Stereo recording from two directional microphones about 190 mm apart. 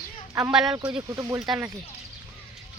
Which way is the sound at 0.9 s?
20° right (ahead or behind).